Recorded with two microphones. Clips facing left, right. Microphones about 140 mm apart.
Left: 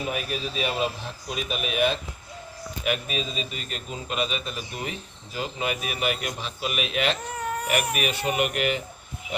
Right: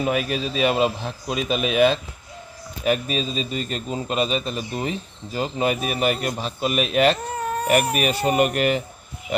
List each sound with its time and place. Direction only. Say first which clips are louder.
0.1 s speech: right 6 dB; 90° right
2.8 s a man's voice: right 6 dB; 35° right (ahead or behind)